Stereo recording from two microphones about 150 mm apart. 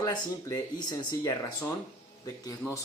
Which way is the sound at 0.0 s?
25° left (ahead or behind).